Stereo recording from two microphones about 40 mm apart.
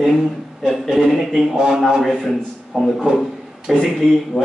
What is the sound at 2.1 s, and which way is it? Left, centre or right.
A man's voice, centre.